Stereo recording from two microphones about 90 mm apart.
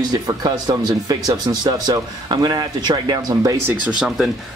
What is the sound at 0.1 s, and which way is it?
Speech, 45° right (ahead or behind).